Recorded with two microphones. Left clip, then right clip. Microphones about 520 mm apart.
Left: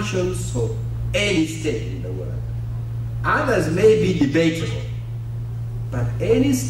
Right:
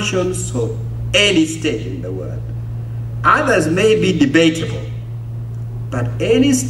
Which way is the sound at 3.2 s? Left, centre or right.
Centre.